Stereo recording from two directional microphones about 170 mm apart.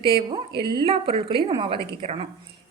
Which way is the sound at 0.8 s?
35° right (ahead or behind).